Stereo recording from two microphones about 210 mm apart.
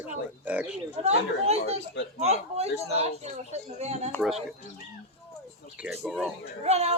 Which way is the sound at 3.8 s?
30° right (ahead or behind).